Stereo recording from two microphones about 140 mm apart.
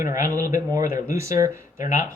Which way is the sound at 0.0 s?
20° right (ahead or behind).